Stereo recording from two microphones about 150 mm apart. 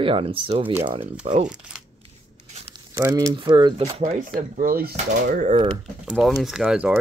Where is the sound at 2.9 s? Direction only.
20° right (ahead or behind).